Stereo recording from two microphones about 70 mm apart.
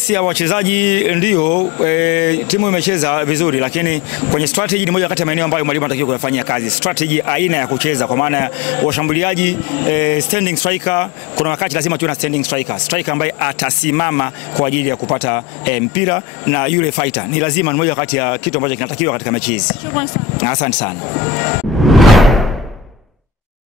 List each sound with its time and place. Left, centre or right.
0.1 s a man's voice: centre
21.8 s whoosh: centre